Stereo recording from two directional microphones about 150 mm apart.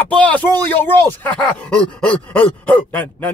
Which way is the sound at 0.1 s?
10° left (ahead or behind).